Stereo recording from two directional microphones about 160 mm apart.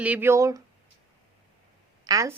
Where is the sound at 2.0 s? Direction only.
20° right (ahead or behind).